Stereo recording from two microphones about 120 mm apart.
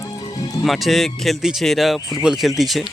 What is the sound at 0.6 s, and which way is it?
Speech, centre (ahead or behind).